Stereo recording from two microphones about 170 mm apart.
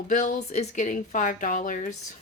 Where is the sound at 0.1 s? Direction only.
45° left (ahead or behind).